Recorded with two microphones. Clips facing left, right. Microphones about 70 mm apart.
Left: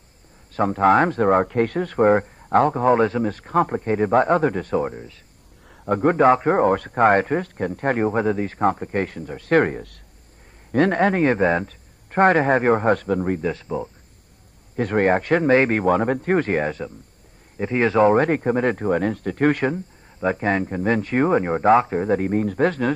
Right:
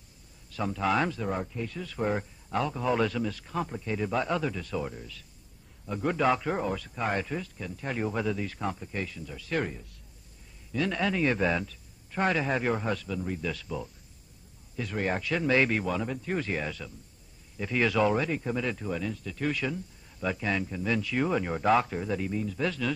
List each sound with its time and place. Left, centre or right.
0.5 s a man's voice: left
5.9 s a man's voice: left
13.5 s speech: left
14.8 s a man's voice: left